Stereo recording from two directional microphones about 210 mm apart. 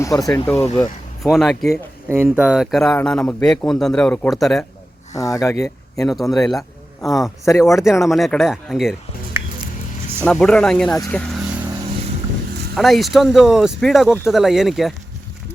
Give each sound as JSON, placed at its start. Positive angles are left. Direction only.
{"t": 0.0, "sound": "speech", "side_deg": 15}
{"t": 0.8, "sound": "speech", "side_deg": 0}
{"t": 2.0, "sound": "a man's voice", "side_deg": -10}
{"t": 5.1, "sound": "speech", "side_deg": 15}
{"t": 6.1, "sound": "a man's voice", "side_deg": 0}
{"t": 10.9, "sound": "speech", "side_deg": 15}
{"t": 12.7, "sound": "a man's voice", "side_deg": 0}